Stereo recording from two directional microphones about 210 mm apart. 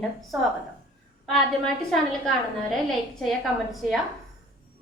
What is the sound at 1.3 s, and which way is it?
A woman's voice, centre (ahead or behind).